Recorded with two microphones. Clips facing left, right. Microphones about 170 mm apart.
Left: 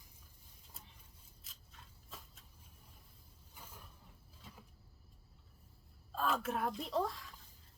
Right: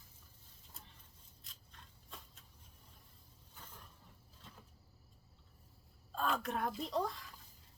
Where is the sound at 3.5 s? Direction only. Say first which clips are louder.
Left 1 dB; 10° left (ahead or behind).